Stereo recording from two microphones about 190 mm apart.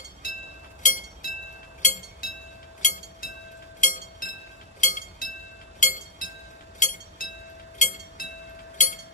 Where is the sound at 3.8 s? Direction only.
40° left (ahead or behind).